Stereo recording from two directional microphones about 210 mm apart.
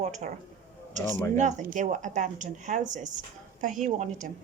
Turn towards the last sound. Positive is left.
turn(degrees=-35)  # may be behind; listen again after turning